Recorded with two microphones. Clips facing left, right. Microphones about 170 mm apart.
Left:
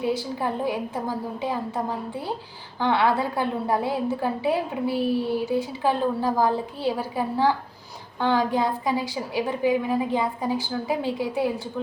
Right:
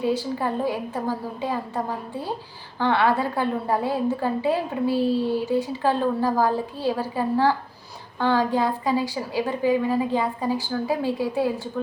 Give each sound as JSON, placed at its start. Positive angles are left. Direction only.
{"t": 0.0, "sound": "a woman's voice", "side_deg": 15}
{"t": 2.8, "sound": "a woman's voice", "side_deg": 15}